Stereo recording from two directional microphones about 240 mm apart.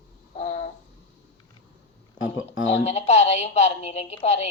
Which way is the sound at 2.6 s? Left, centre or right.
Left.